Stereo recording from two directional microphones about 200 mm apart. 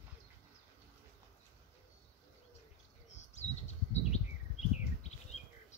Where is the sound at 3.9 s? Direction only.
35° left (ahead or behind).